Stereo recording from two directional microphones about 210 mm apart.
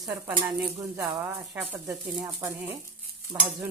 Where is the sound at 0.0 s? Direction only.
10° right (ahead or behind).